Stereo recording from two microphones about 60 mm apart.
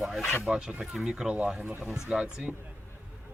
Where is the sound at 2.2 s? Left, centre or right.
Centre.